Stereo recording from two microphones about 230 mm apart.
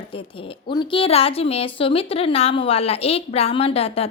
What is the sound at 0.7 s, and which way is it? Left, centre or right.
A woman's voice, left.